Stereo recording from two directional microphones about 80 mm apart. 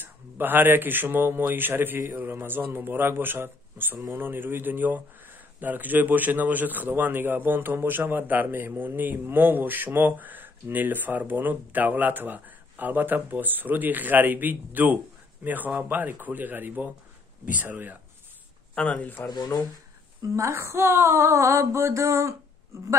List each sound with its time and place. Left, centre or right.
0.0 s speech: right
18.8 s speech: centre
19.2 s speech: left
20.2 s speech: right